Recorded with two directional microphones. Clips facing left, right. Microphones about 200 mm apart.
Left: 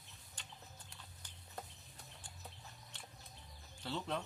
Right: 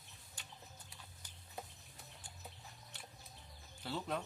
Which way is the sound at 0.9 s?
10° right (ahead or behind).